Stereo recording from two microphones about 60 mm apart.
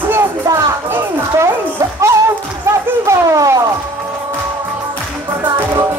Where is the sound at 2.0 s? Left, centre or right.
Right.